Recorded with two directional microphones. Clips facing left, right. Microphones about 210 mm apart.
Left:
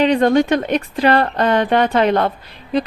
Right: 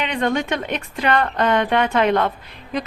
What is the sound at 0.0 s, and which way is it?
Speech, 35° left (ahead or behind).